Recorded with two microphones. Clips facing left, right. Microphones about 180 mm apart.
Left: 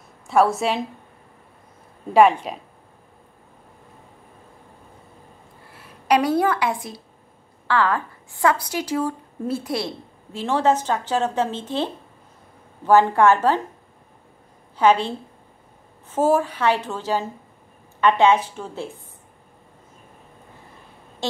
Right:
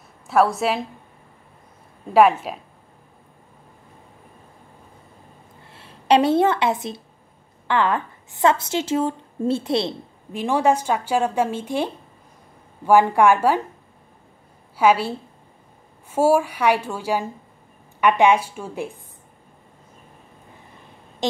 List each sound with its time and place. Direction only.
0.3 s a woman's voice: centre (ahead or behind)
2.1 s a woman's voice: 5° right (ahead or behind)
5.7 s a woman's voice: 25° right (ahead or behind); by 13.6 s 10° right (ahead or behind)
14.8 s a woman's voice: 10° right (ahead or behind)
21.2 s a woman's voice: 15° right (ahead or behind)